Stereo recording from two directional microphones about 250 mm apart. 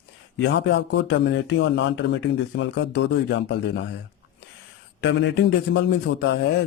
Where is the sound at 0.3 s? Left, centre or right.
Left.